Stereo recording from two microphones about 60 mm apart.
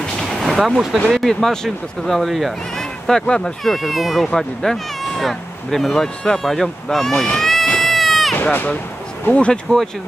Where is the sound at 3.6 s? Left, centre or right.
Centre.